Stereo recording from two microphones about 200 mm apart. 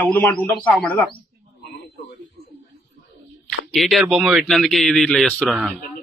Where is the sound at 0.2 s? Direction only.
10° left (ahead or behind).